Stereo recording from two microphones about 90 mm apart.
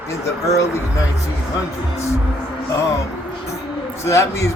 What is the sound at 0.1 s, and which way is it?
Speech, 35° left (ahead or behind).